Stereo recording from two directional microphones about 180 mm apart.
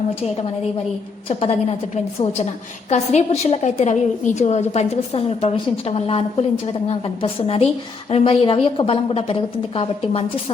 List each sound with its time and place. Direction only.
1.3 s a woman's voice: 35° left (ahead or behind)
2.9 s a woman's voice: 40° left (ahead or behind)